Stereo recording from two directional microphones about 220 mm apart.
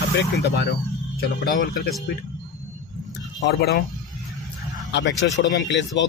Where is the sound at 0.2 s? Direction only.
50° left (ahead or behind).